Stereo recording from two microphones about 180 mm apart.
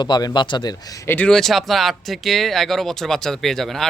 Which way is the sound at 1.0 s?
10° left (ahead or behind).